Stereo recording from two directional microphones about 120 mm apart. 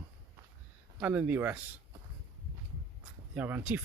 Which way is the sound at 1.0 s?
15° right (ahead or behind).